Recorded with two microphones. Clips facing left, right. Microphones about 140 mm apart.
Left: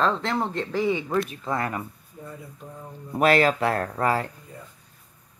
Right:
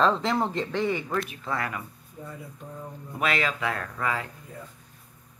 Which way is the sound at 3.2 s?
40° left (ahead or behind).